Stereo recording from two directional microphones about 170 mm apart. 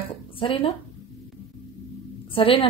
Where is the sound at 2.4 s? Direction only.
30° left (ahead or behind).